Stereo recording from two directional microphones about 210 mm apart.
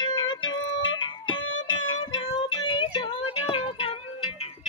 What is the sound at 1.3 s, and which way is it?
Music, 70° left (ahead or behind).